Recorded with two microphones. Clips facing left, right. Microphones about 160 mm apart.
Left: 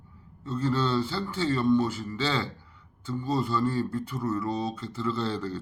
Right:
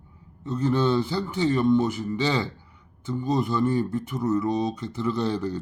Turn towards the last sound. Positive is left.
turn(degrees=-15)  # may be behind; listen again after turning